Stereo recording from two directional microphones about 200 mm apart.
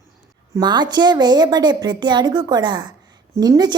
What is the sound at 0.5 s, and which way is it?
A woman's voice, 20° right (ahead or behind).